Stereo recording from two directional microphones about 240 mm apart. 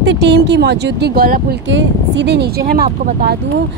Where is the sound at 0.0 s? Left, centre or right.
Right.